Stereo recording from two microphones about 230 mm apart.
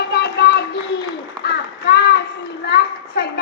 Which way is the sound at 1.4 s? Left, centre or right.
Left.